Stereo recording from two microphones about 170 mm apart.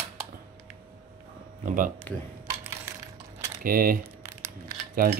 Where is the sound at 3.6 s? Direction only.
60° right (ahead or behind).